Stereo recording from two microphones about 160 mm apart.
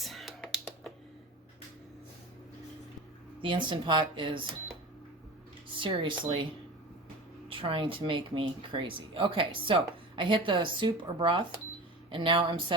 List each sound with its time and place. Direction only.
0.0 s computer keyboard: centre (ahead or behind)
3.4 s speech: 30° right (ahead or behind)
5.8 s speech: 30° right (ahead or behind)
7.6 s speech: 35° right (ahead or behind)